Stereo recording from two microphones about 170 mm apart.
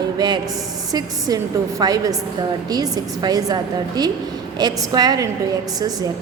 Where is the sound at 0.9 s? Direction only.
20° right (ahead or behind).